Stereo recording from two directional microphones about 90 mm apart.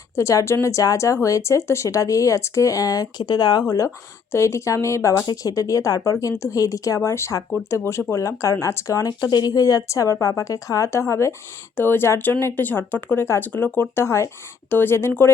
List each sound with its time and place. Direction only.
0.2 s speech: 30° left (ahead or behind); by 3.6 s 50° left (ahead or behind)
3.7 s speech: 40° left (ahead or behind)
5.2 s speech: 45° left (ahead or behind); by 15.3 s 25° left (ahead or behind)